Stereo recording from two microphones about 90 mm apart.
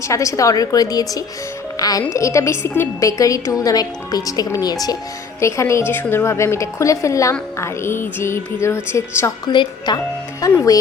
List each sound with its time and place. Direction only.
0.0 s speech: 35° left (ahead or behind)
3.0 s speech: 40° left (ahead or behind)
5.4 s a woman's voice: 35° left (ahead or behind)
9.5 s a woman's voice: 55° left (ahead or behind)
10.4 s speech: 40° left (ahead or behind)